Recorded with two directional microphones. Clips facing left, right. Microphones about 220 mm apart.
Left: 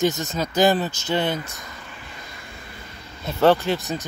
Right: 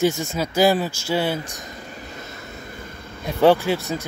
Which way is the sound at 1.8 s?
40° right (ahead or behind).